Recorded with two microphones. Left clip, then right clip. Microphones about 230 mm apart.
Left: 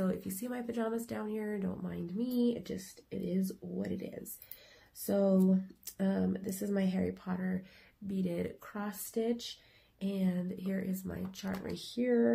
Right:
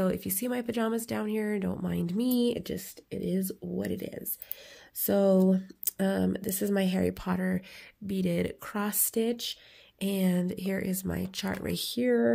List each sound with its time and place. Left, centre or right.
0.0 s speech: right